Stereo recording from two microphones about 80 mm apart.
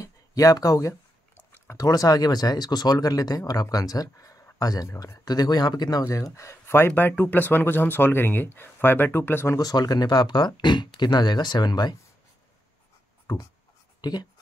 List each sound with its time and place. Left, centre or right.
0.0 s a sound: left
1.3 s a sound: left
1.8 s speech: left
6.0 s speech: left
6.9 s speech: left
9.6 s speech: left
14.0 s speech: left